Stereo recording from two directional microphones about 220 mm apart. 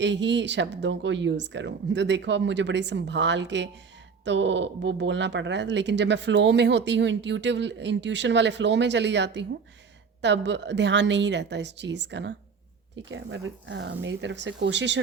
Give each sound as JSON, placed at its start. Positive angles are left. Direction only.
{"t": 0.0, "sound": "speech", "side_deg": -55}